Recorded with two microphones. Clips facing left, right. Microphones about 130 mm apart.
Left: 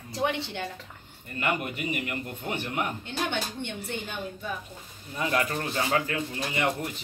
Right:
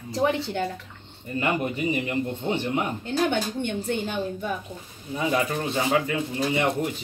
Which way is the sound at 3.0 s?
45° right (ahead or behind).